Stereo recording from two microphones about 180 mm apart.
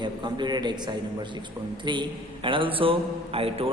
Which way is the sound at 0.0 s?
25° right (ahead or behind).